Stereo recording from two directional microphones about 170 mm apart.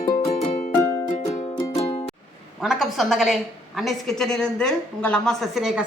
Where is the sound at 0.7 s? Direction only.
15° left (ahead or behind).